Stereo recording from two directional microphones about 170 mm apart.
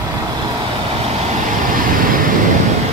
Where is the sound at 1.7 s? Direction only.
55° right (ahead or behind).